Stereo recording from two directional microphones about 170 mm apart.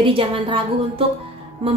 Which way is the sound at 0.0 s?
30° right (ahead or behind).